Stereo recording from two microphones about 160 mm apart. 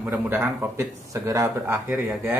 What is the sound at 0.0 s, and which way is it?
Speech, 10° right (ahead or behind).